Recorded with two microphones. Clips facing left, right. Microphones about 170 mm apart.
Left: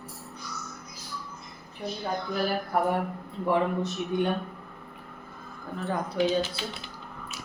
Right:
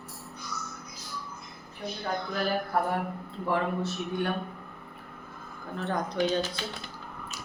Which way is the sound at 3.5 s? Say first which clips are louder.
Left 3 dB; 15° left (ahead or behind).